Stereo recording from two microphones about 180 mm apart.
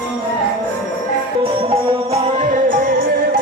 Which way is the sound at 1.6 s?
30° right (ahead or behind).